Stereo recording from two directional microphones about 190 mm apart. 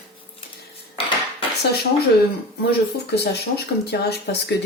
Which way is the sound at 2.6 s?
60° left (ahead or behind).